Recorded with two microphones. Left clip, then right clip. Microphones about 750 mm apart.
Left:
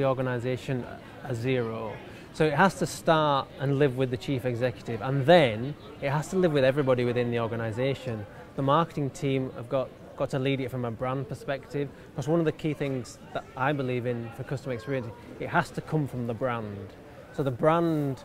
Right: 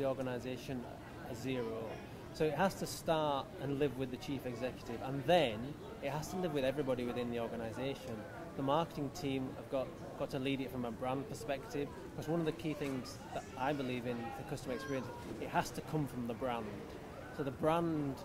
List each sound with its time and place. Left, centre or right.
0.0 s a man's voice: left
17.5 s a man's voice: left